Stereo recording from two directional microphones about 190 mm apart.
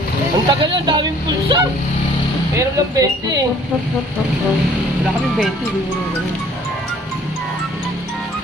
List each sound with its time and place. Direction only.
0.5 s speech: 25° right (ahead or behind)